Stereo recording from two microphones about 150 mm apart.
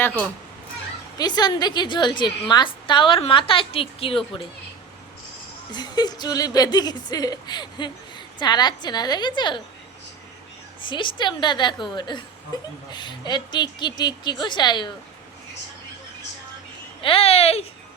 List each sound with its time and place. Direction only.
1.2 s a woman's voice: 30° left (ahead or behind)
5.7 s speech: 30° left (ahead or behind)
10.8 s a woman's voice: 35° left (ahead or behind)
17.0 s a woman's voice: 40° left (ahead or behind)